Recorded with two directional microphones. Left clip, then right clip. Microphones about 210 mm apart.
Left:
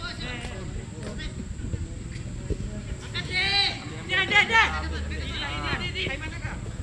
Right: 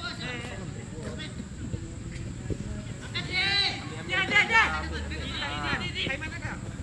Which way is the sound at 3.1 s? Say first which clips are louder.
Left 2 dB; 20° left (ahead or behind).